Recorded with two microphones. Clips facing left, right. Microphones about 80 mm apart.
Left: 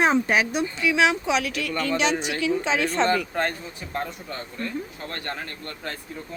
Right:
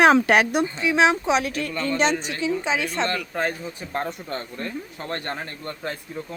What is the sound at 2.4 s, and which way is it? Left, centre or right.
Speech, centre.